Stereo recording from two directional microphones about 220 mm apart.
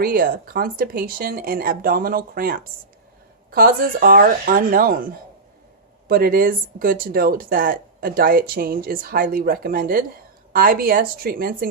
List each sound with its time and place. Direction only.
0.0 s speech: 40° right (ahead or behind)
6.1 s speech: 40° right (ahead or behind)